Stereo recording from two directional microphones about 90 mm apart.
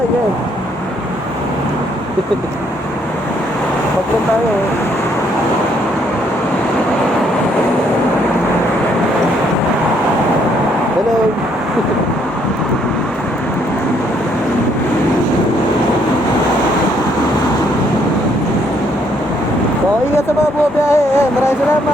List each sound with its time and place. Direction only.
20.8 s music: 30° left (ahead or behind)